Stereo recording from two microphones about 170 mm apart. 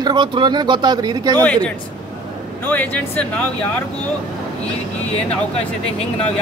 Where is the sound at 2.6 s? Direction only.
10° left (ahead or behind).